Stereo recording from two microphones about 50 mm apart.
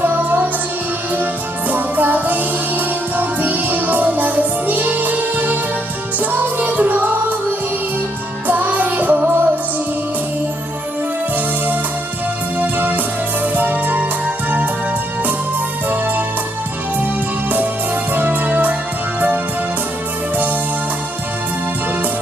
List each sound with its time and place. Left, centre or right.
0.0 s music: right
1.7 s music: right
8.4 s music: right
12.5 s music: right
15.9 s music: right
18.1 s music: right